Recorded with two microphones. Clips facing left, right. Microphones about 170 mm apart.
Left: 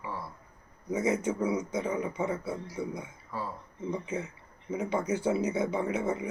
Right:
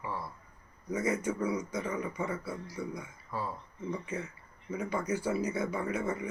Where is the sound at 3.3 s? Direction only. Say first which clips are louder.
Even; centre (ahead or behind).